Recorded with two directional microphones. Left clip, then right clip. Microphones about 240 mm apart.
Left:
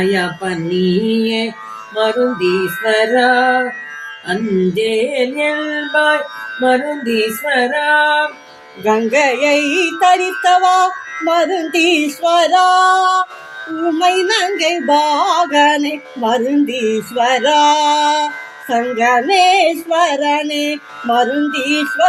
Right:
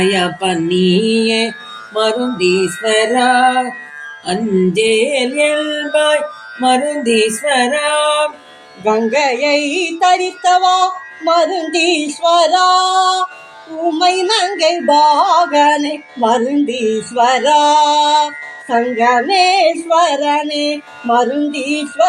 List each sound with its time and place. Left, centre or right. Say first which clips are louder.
0.8 s music: right 1 dB; centre
8.8 s music: even; centre
21.5 s music: left 3 dB; left